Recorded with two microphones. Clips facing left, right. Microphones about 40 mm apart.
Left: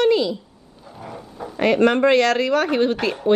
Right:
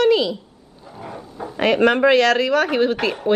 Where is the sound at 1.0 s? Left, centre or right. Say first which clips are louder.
Right 2 dB; centre.